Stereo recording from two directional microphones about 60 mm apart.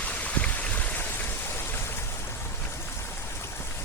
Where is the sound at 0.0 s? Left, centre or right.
Left.